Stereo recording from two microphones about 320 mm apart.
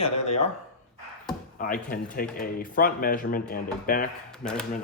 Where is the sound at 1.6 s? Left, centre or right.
Left.